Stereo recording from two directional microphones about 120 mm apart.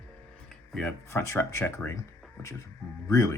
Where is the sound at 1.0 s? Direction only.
25° left (ahead or behind).